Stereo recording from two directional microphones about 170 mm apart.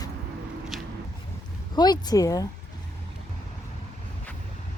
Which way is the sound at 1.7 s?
25° left (ahead or behind).